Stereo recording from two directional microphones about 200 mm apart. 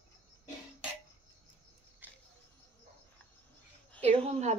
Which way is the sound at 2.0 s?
10° right (ahead or behind).